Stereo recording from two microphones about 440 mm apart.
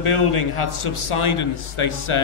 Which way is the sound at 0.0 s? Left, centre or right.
Left.